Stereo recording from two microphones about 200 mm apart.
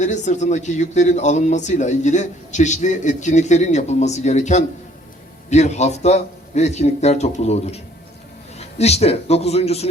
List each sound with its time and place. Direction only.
0.0 s speech: 35° left (ahead or behind)